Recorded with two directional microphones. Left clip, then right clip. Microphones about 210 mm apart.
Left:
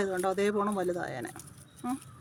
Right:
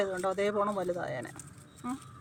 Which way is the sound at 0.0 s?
55° left (ahead or behind).